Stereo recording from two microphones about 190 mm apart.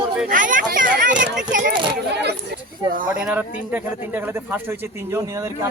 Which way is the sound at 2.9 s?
45° right (ahead or behind).